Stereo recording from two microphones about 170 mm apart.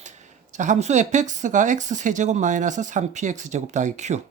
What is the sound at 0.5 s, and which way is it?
Speech, 45° right (ahead or behind).